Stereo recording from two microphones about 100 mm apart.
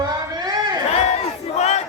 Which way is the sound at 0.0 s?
45° right (ahead or behind).